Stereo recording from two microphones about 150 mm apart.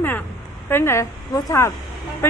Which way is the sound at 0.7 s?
15° left (ahead or behind).